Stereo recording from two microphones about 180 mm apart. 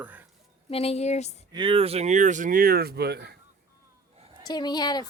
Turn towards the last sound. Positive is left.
turn(degrees=25)  # may be behind; listen again after turning